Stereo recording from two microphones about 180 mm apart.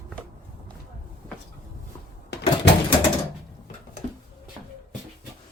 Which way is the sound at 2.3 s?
65° left (ahead or behind).